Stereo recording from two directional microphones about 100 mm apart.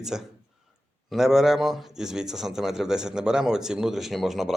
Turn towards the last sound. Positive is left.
turn(degrees=0)  # may be behind; listen again after turning